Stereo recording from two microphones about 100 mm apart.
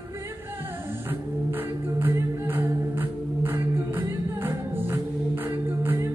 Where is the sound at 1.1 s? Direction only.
20° right (ahead or behind).